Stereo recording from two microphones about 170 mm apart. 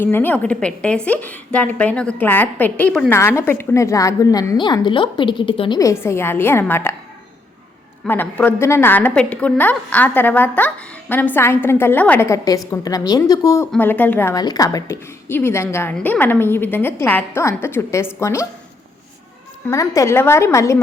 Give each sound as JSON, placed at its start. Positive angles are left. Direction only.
{"t": 0.0, "sound": "a woman's voice", "side_deg": 10}
{"t": 8.0, "sound": "a woman's voice", "side_deg": 10}
{"t": 19.6, "sound": "a woman's voice", "side_deg": 20}